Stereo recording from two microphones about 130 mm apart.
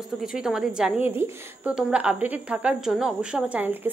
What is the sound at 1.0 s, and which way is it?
A woman's voice, 15° right (ahead or behind).